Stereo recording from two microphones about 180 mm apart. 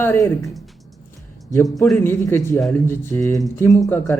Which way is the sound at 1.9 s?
10° left (ahead or behind).